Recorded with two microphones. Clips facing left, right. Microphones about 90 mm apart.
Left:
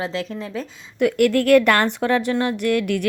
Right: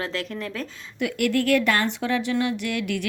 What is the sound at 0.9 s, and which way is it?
A woman's voice, 50° left (ahead or behind).